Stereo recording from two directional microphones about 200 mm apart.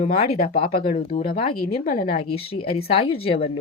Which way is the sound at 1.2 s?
45° left (ahead or behind).